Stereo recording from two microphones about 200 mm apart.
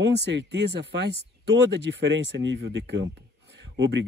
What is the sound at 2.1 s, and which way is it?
Speech, 65° right (ahead or behind).